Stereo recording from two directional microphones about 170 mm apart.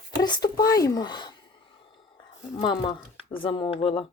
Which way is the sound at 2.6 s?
30° left (ahead or behind).